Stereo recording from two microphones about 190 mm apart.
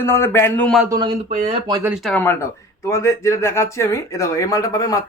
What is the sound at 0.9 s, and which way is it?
Speech, 25° right (ahead or behind).